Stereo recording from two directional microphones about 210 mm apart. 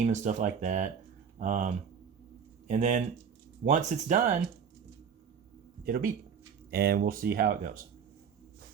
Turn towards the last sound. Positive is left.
turn(degrees=-40)  # may be behind; listen again after turning